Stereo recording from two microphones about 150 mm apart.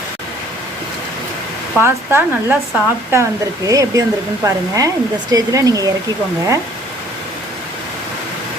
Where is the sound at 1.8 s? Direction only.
15° right (ahead or behind).